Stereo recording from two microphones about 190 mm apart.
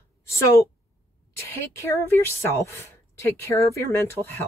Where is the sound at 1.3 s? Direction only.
15° left (ahead or behind).